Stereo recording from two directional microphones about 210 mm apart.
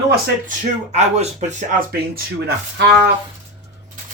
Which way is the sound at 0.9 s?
30° right (ahead or behind).